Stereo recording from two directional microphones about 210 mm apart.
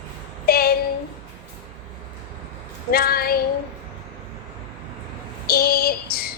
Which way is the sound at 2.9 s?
45° left (ahead or behind).